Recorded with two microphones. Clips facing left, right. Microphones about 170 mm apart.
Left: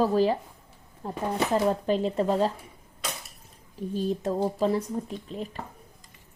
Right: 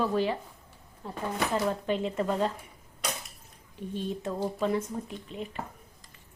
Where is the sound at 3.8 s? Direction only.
40° left (ahead or behind).